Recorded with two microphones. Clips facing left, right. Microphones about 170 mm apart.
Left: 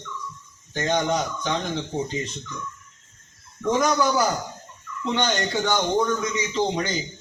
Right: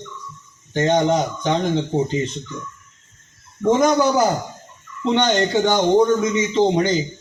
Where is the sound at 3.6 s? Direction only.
30° right (ahead or behind).